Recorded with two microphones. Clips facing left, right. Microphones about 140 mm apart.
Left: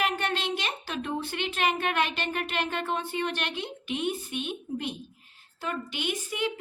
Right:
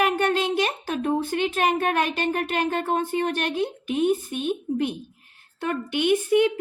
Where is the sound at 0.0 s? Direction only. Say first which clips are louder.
Right 7 dB; 45° right (ahead or behind).